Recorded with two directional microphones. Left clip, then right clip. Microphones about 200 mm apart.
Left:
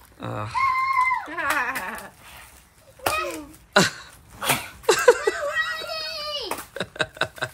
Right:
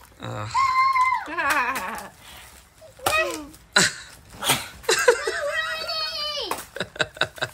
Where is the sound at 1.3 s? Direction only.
45° right (ahead or behind).